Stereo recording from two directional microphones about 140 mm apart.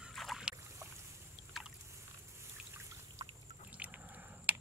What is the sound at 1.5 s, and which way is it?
Boat, centre (ahead or behind).